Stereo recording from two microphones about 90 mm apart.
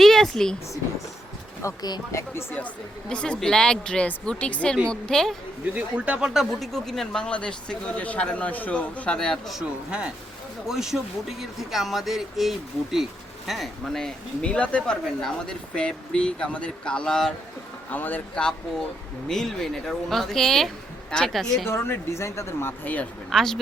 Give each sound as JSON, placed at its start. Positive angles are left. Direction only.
{"t": 0.0, "sound": "a sound", "side_deg": 5}
{"t": 1.6, "sound": "speech", "side_deg": 40}
{"t": 3.1, "sound": "speech", "side_deg": 10}
{"t": 5.7, "sound": "speech", "side_deg": -10}
{"t": 17.9, "sound": "speech", "side_deg": 20}
{"t": 19.3, "sound": "speech", "side_deg": 5}
{"t": 21.7, "sound": "speech", "side_deg": 30}
{"t": 23.3, "sound": "speech", "side_deg": 5}